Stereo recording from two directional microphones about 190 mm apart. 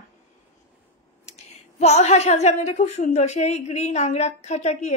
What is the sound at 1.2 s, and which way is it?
A woman's voice, 35° left (ahead or behind).